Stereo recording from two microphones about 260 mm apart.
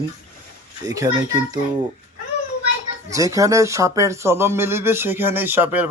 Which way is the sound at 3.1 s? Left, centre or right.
Centre.